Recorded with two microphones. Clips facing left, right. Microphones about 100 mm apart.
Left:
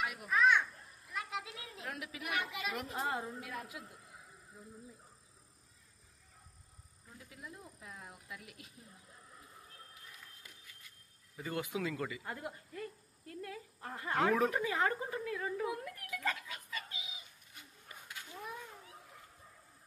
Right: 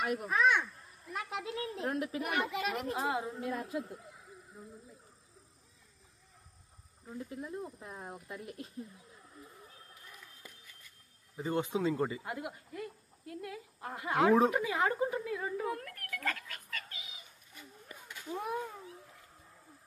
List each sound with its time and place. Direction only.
0.0 s a child's voice: 45° right (ahead or behind)
3.0 s a woman's voice: 10° right (ahead or behind)
3.3 s speech: 40° right (ahead or behind)
7.1 s speech: 35° right (ahead or behind)
11.3 s speech: 25° right (ahead or behind)
12.2 s a woman's voice: 10° right (ahead or behind)
15.6 s a child's voice: 15° left (ahead or behind)
18.4 s speech: 65° right (ahead or behind)